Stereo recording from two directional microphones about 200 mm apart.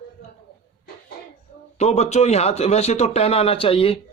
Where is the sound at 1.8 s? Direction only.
35° left (ahead or behind).